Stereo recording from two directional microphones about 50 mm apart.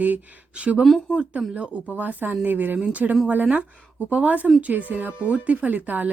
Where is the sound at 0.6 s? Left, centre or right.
Right.